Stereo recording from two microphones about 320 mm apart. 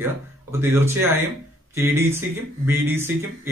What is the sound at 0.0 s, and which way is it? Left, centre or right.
Speech, centre.